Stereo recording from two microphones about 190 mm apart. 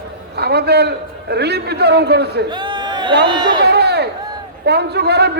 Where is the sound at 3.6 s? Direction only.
60° right (ahead or behind).